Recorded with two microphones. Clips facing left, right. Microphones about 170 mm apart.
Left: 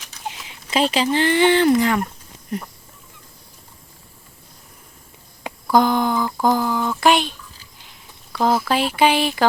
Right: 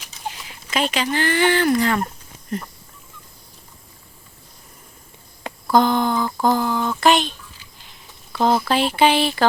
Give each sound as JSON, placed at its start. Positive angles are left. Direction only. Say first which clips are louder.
{"t": 0.4, "sound": "speech", "louder": "left 4 dB", "side_deg": 30}
{"t": 5.7, "sound": "a sound", "louder": "even", "side_deg": 10}
{"t": 6.4, "sound": "speech", "louder": "even", "side_deg": 10}